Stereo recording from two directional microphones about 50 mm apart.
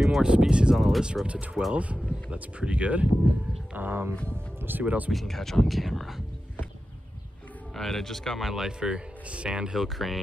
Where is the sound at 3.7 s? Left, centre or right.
Right.